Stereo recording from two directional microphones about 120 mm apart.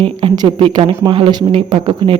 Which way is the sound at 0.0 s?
50° right (ahead or behind).